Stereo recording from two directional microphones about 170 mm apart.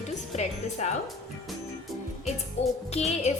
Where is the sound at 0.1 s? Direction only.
45° left (ahead or behind).